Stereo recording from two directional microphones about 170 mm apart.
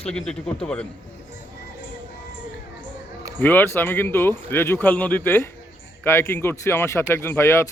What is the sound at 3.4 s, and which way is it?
Speech, 10° left (ahead or behind).